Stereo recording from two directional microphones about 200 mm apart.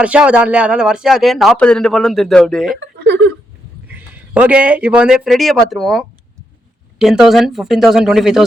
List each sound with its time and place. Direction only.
0.0 s a man's voice: 5° right (ahead or behind)
2.8 s chuckle: 60° right (ahead or behind)
3.9 s a man's voice: 5° right (ahead or behind)